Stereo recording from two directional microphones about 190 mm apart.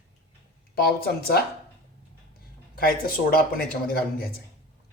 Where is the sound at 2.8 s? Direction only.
50° left (ahead or behind).